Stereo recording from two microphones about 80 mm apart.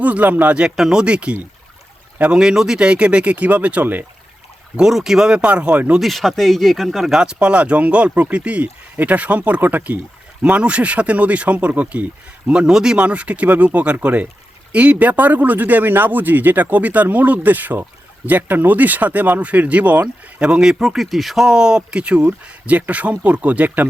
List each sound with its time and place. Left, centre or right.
0.0 s speech: centre
4.8 s speech: centre
6.0 s speech: centre